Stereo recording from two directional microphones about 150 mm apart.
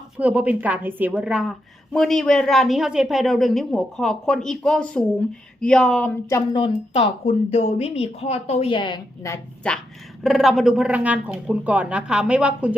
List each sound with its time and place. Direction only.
0.2 s a woman's voice: 10° right (ahead or behind); by 6.1 s 5° left (ahead or behind)
6.5 s a woman's voice: 40° left (ahead or behind)
9.2 s a woman's voice: 20° left (ahead or behind)
10.2 s speech: centre (ahead or behind)